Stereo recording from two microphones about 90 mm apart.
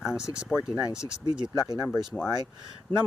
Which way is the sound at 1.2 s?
55° right (ahead or behind).